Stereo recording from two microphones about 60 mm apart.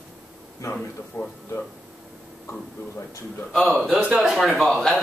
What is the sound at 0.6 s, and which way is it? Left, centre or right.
Speech, left.